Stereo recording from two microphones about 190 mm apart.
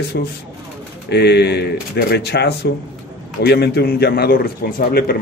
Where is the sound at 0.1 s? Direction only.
60° left (ahead or behind).